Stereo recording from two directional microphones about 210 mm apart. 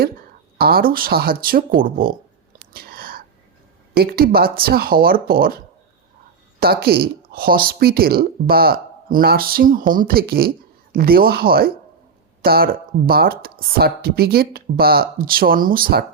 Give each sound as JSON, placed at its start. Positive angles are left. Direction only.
{"t": 0.6, "sound": "speech", "side_deg": -45}
{"t": 2.7, "sound": "whispering", "side_deg": -45}
{"t": 3.9, "sound": "speech", "side_deg": -45}
{"t": 6.6, "sound": "speech", "side_deg": -45}